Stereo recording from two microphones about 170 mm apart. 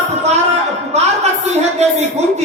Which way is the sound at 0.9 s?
40° right (ahead or behind).